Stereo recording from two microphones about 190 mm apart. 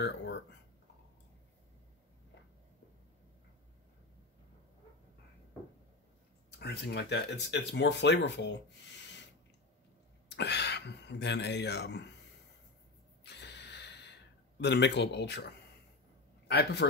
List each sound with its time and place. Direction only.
6.6 s speech: 60° left (ahead or behind)
10.2 s speech: 60° left (ahead or behind)
13.2 s gasp: 60° left (ahead or behind)
14.6 s a man's voice: 65° left (ahead or behind)